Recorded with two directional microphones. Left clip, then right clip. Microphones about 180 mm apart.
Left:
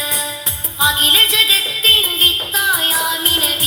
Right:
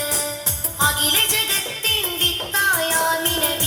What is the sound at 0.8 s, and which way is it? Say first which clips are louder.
Music: left 7 dB; 25° left (ahead or behind).